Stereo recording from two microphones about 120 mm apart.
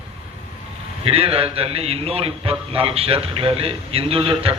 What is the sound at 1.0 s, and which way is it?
A man's voice, 55° right (ahead or behind).